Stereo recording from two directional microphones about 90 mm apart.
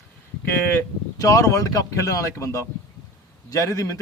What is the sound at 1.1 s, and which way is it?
A man's voice, 40° left (ahead or behind).